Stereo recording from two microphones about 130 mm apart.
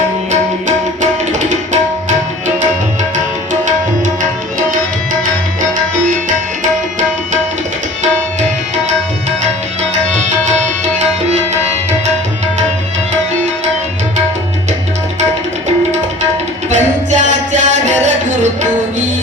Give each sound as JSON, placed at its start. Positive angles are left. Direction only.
{"t": 11.3, "sound": "tabla", "side_deg": -60}
{"t": 16.6, "sound": "music", "side_deg": -65}